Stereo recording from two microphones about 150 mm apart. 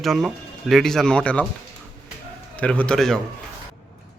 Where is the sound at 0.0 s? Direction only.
Centre (ahead or behind).